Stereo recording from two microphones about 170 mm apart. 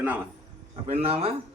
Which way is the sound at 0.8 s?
35° right (ahead or behind).